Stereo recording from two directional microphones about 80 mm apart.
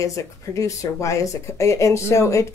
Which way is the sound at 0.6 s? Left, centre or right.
Left.